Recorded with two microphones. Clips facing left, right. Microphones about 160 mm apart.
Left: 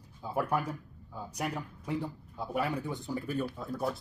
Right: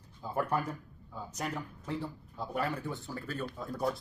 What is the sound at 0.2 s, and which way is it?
Speech, 10° left (ahead or behind).